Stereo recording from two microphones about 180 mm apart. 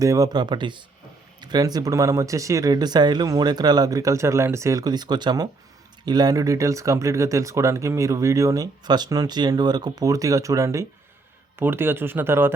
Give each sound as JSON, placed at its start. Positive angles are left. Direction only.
{"t": 0.0, "sound": "speech", "side_deg": -20}